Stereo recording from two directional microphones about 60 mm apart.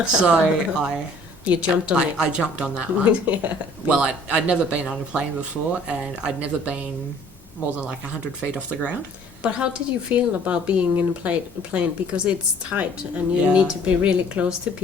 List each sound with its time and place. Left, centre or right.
0.0 s speech: centre